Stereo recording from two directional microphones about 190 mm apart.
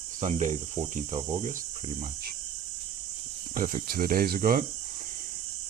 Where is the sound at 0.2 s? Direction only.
35° right (ahead or behind).